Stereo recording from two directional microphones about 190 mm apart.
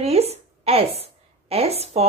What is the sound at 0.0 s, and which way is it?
A woman's voice, 35° right (ahead or behind).